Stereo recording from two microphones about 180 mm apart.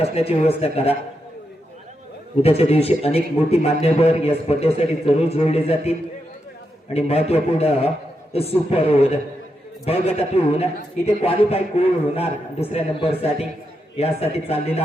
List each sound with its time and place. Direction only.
0.0 s a man's voice: 35° left (ahead or behind)
2.4 s a man's voice: 35° left (ahead or behind)
6.9 s a man's voice: 35° left (ahead or behind)